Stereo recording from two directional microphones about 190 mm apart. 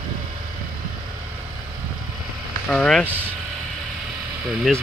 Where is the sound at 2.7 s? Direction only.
5° left (ahead or behind).